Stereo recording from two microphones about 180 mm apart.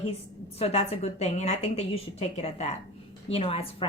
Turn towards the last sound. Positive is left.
turn(degrees=30)  # may be behind; listen again after turning